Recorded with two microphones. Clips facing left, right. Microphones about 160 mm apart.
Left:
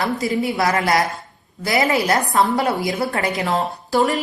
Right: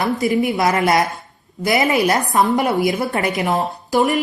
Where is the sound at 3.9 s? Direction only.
15° right (ahead or behind).